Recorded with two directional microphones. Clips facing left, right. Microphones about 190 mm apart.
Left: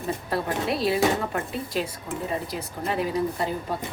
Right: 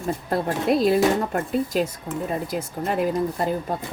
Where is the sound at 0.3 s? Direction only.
45° right (ahead or behind).